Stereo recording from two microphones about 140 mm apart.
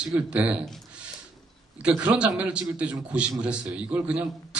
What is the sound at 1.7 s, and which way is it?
A man's voice, 10° right (ahead or behind).